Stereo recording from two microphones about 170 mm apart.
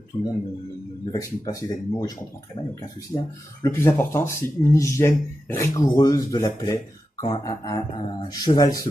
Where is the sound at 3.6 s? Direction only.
15° left (ahead or behind).